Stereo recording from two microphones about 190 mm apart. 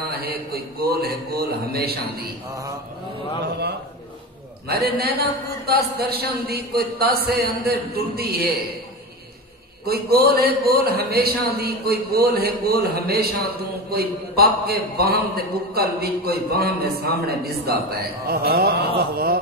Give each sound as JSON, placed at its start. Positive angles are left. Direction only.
{"t": 0.0, "sound": "a man's voice", "side_deg": -55}
{"t": 4.6, "sound": "a man's voice", "side_deg": -55}
{"t": 9.8, "sound": "a man's voice", "side_deg": -55}